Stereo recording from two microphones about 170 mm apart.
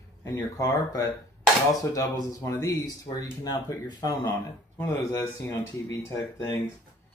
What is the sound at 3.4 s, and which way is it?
Speech, 20° left (ahead or behind).